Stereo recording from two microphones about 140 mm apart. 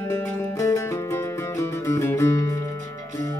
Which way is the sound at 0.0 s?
20° left (ahead or behind).